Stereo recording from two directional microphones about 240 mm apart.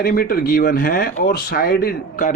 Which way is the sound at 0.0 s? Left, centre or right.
Left.